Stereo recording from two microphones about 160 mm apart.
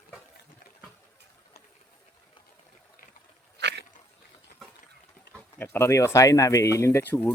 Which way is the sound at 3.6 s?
90° right.